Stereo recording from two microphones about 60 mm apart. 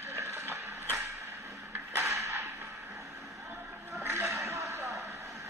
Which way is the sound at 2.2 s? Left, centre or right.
Right.